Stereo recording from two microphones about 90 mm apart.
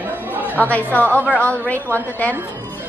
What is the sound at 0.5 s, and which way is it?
A woman's voice, 20° left (ahead or behind).